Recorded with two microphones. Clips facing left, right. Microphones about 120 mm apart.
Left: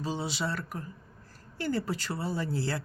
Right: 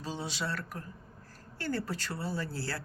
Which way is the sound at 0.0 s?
10° left (ahead or behind).